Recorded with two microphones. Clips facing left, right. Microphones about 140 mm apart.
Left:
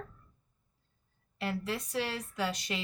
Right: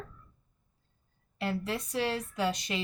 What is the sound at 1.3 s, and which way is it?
A woman's voice, 20° right (ahead or behind).